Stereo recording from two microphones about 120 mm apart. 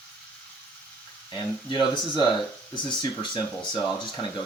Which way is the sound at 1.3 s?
40° left (ahead or behind).